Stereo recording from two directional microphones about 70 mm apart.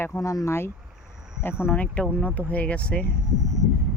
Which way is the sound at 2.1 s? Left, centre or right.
Left.